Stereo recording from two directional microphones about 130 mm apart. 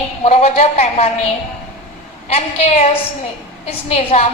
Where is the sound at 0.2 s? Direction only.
55° left (ahead or behind).